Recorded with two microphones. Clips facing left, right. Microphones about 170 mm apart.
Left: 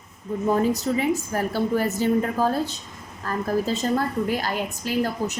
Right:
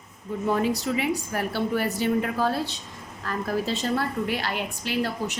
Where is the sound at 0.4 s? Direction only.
40° left (ahead or behind).